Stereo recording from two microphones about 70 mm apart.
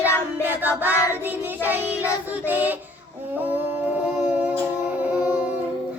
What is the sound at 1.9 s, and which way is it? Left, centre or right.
Music, right.